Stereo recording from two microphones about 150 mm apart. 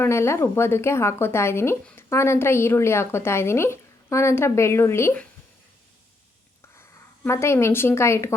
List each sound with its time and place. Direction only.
0.0 s speech: 15° left (ahead or behind)
7.3 s speech: 15° left (ahead or behind)